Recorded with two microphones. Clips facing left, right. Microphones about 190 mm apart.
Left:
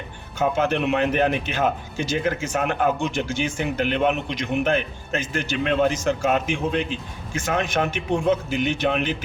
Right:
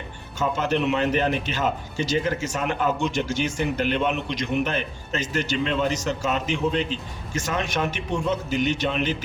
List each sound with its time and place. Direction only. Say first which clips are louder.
0.3 s a man's voice: left 2 dB; 55° left (ahead or behind)